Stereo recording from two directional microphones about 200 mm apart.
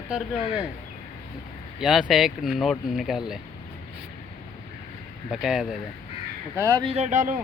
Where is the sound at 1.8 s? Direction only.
Centre (ahead or behind).